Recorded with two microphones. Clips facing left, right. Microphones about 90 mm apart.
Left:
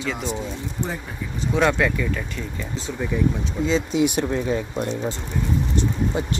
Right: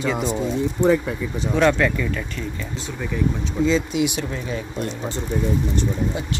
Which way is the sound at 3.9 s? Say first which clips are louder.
Left 2 dB; 40° left (ahead or behind).